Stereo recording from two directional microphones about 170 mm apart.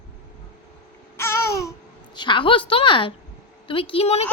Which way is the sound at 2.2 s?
30° left (ahead or behind).